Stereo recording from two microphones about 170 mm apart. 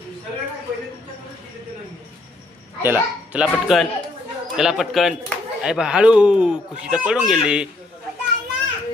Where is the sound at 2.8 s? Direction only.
10° right (ahead or behind).